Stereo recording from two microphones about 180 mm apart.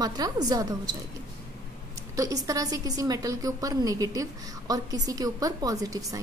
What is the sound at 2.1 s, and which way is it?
A woman's voice, 20° right (ahead or behind).